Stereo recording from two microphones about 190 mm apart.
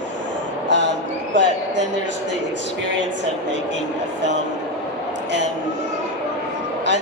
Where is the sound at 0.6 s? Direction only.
70° right (ahead or behind).